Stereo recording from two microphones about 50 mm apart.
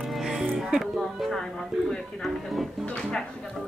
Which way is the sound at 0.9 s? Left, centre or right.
Centre.